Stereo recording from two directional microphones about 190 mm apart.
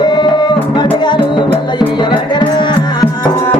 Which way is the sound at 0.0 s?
25° left (ahead or behind).